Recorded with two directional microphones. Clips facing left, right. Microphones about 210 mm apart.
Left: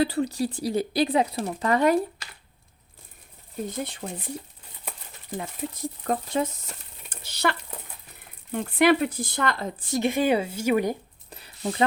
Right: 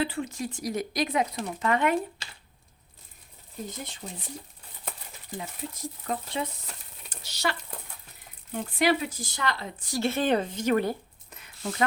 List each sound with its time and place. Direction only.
0.0 s speech: 35° left (ahead or behind)
4.0 s speech: 65° left (ahead or behind)
5.4 s speech: 55° left (ahead or behind)
8.5 s speech: 60° left (ahead or behind)
9.8 s a woman's voice: 20° left (ahead or behind)
11.3 s a sound: 35° left (ahead or behind)